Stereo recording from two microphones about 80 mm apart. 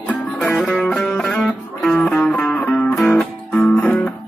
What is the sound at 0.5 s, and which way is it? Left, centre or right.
Music, centre.